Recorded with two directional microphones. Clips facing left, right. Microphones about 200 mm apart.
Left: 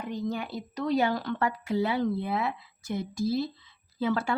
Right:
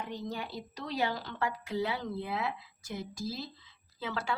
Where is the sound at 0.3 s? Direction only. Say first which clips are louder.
Left 6 dB; 50° left (ahead or behind).